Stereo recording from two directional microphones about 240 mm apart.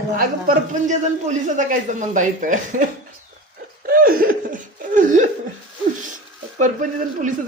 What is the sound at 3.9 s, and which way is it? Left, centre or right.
Laughter, right.